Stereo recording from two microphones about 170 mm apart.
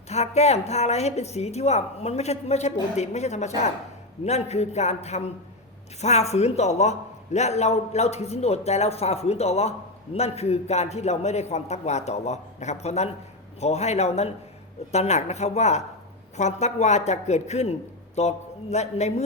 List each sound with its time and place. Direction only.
0.1 s a man's voice: 40° left (ahead or behind)